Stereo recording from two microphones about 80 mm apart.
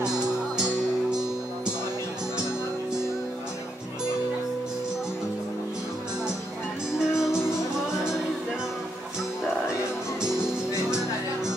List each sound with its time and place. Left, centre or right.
7.0 s music: centre